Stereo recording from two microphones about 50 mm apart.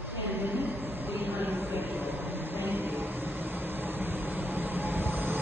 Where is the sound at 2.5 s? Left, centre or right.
Right.